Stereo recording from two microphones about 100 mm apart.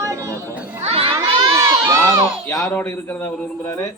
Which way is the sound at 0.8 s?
80° right.